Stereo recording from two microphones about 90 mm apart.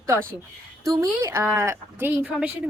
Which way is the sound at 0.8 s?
35° right (ahead or behind).